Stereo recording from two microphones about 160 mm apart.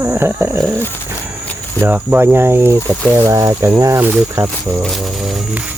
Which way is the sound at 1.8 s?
10° right (ahead or behind).